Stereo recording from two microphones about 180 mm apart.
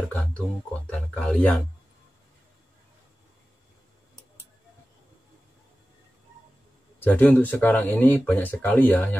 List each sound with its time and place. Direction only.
0.1 s speech: 5° left (ahead or behind)
7.0 s speech: 10° left (ahead or behind)